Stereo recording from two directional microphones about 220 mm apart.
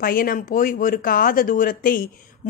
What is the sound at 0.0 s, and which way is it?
Speech, 40° left (ahead or behind).